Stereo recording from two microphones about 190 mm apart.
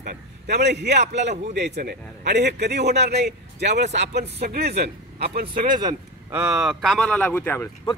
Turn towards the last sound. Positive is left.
turn(degrees=10)  # may be behind; listen again after turning